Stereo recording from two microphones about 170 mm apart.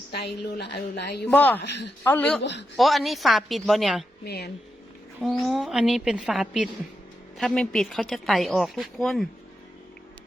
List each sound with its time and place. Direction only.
0.1 s a woman's voice: 70° left (ahead or behind)
1.2 s speech: 10° left (ahead or behind)
1.6 s a man's voice: 85° left
2.0 s speech: 10° left (ahead or behind)
2.4 s a man's voice: 90° left
2.7 s speech: centre (ahead or behind)
4.2 s a woman's voice: 70° left (ahead or behind)
5.2 s speech: centre (ahead or behind)